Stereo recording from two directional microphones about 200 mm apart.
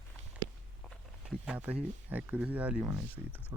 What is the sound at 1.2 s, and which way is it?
Speech, 5° right (ahead or behind).